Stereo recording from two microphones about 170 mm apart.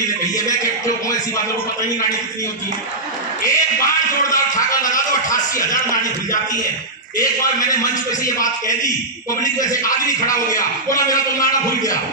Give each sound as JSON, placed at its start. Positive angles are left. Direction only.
{"t": 0.3, "sound": "a man's voice", "side_deg": 20}
{"t": 3.4, "sound": "a man's voice", "side_deg": 20}
{"t": 7.2, "sound": "a man's voice", "side_deg": 20}